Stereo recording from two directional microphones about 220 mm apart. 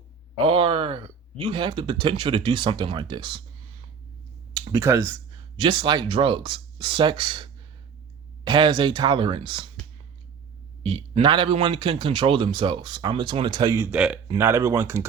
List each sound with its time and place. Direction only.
0.4 s a man's voice: 25° right (ahead or behind)
4.5 s a man's voice: 15° right (ahead or behind)
10.8 s a man's voice: 25° right (ahead or behind)